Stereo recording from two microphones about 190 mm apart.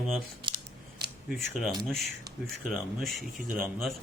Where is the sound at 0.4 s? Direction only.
25° right (ahead or behind).